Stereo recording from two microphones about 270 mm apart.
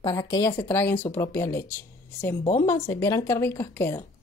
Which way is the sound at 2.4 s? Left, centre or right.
Left.